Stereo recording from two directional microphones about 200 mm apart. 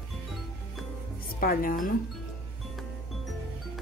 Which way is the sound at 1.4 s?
45° left (ahead or behind).